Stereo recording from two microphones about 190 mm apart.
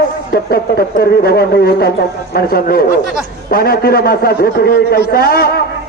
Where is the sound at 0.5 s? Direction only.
50° left (ahead or behind).